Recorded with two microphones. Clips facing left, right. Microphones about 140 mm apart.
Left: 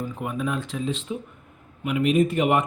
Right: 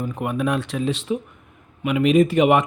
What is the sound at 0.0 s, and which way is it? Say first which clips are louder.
Speech: right 5 dB; 65° right (ahead or behind).